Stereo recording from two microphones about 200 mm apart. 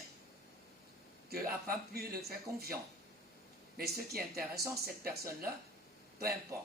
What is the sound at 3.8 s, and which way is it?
Speech, 50° right (ahead or behind).